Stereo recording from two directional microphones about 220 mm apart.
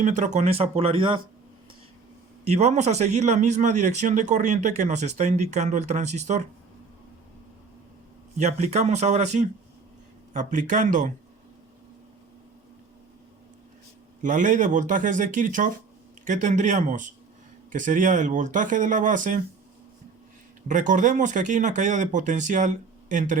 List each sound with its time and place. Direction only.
0.0 s speech: 35° right (ahead or behind)
2.4 s a man's voice: 30° right (ahead or behind)
8.4 s a man's voice: 30° right (ahead or behind)
14.2 s a man's voice: 35° right (ahead or behind)
20.7 s a man's voice: 35° right (ahead or behind)